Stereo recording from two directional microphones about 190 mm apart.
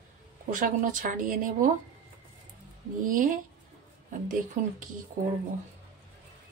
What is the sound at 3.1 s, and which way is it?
Speech, 45° right (ahead or behind).